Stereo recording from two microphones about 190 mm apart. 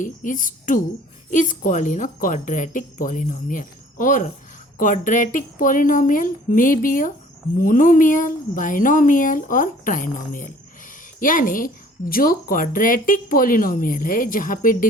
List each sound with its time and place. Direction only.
0.0 s a woman's voice: 45° left (ahead or behind)